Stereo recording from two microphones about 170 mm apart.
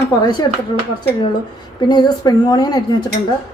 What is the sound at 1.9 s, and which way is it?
Speech, 25° left (ahead or behind).